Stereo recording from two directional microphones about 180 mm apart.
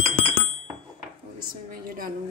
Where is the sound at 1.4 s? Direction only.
55° right (ahead or behind).